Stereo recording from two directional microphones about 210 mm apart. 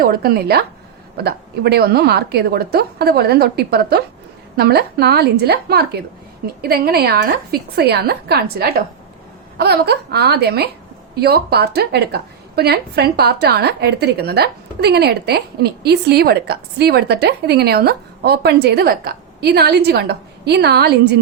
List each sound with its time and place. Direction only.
0.0 s a woman's voice: 45° right (ahead or behind)